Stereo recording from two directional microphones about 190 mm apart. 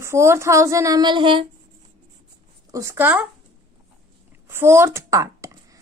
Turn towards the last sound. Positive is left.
turn(degrees=-15)  # may be behind; listen again after turning